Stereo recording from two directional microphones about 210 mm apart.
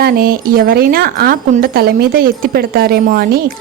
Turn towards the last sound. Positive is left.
turn(degrees=-45)  # may be behind; listen again after turning